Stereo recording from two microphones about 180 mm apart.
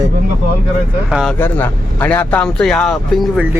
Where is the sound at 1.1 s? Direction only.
Centre (ahead or behind).